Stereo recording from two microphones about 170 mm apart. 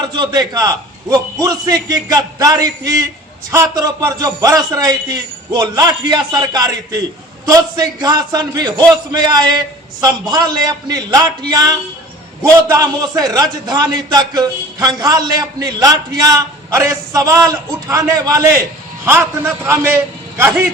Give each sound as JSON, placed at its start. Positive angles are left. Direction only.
{"t": 0.0, "sound": "a man's voice", "side_deg": -25}